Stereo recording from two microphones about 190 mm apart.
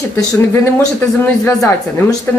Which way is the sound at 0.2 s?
15° left (ahead or behind).